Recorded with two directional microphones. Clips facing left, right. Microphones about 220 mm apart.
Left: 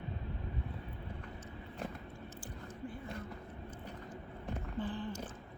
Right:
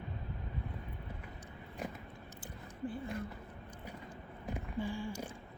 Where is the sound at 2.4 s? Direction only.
30° right (ahead or behind).